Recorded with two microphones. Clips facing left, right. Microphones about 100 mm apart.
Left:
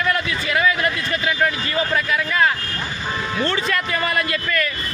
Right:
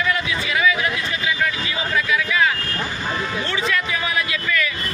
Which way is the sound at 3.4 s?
45° left (ahead or behind).